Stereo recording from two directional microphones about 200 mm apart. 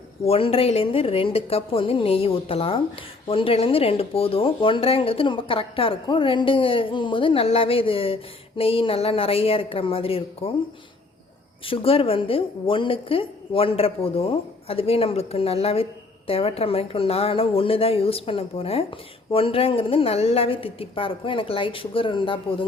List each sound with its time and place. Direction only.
0.3 s a woman's voice: 30° left (ahead or behind)
11.6 s a woman's voice: 25° left (ahead or behind)